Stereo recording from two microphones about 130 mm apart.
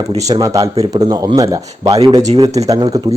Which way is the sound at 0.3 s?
25° right (ahead or behind).